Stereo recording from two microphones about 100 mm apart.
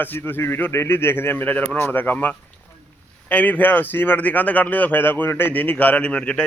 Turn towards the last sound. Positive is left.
turn(degrees=10)  # may be behind; listen again after turning